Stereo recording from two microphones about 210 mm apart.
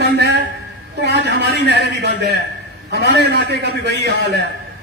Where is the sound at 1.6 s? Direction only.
55° right (ahead or behind).